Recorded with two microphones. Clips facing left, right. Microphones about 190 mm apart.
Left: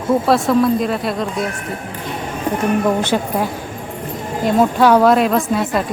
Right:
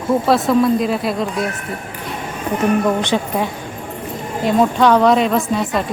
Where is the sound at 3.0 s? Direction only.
5° left (ahead or behind).